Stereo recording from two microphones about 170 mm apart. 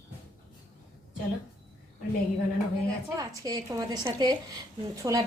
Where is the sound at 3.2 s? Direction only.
20° right (ahead or behind).